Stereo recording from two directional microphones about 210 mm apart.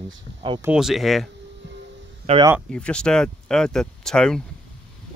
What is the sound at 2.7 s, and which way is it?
Speech, 5° left (ahead or behind).